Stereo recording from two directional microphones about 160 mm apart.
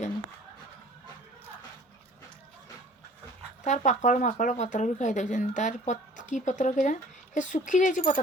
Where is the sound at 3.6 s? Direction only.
50° left (ahead or behind).